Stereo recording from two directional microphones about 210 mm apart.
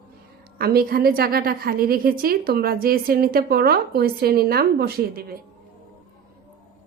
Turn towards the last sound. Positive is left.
turn(degrees=-45)  # may be behind; listen again after turning